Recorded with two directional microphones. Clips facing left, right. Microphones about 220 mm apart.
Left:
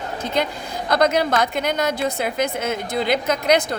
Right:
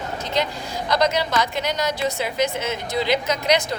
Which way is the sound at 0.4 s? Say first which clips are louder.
Left 1 dB; 55° left (ahead or behind).